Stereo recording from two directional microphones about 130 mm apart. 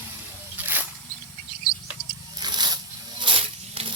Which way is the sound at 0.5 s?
15° right (ahead or behind).